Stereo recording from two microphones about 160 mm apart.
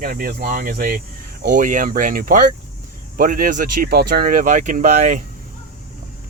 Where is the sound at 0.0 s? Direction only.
70° right (ahead or behind); by 5.2 s 50° right (ahead or behind).